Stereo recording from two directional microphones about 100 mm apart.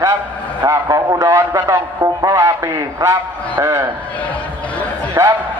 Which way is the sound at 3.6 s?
25° right (ahead or behind).